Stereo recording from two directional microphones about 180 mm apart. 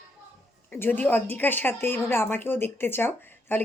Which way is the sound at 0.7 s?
10° left (ahead or behind).